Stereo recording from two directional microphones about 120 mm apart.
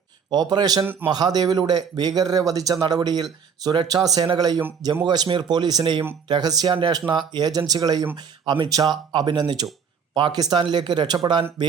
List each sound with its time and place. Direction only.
0.3 s speech: 35° right (ahead or behind)
0.9 s speech: 15° right (ahead or behind)
1.1 s speech: 35° right (ahead or behind)